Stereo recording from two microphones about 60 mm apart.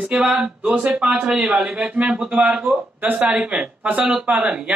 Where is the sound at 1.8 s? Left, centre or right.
Right.